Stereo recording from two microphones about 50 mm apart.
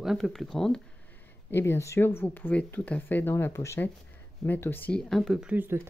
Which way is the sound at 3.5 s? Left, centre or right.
Left.